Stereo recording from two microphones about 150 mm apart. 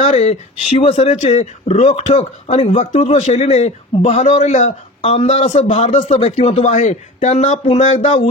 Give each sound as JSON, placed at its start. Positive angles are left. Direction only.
{"t": 0.0, "sound": "speech", "side_deg": 45}